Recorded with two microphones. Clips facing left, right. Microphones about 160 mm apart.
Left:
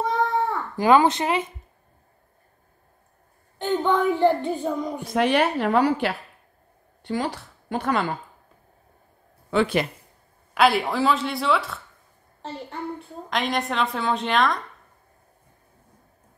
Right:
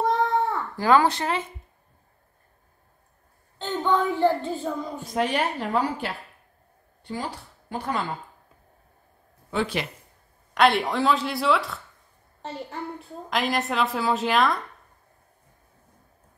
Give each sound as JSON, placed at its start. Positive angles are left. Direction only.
{"t": 0.0, "sound": "a sound", "side_deg": 0}
{"t": 0.7, "sound": "child singing", "side_deg": 20}
{"t": 3.5, "sound": "child singing", "side_deg": 15}
{"t": 5.0, "sound": "a woman's voice", "side_deg": 80}
{"t": 9.5, "sound": "speech", "side_deg": 65}
{"t": 10.5, "sound": "a woman's voice", "side_deg": 0}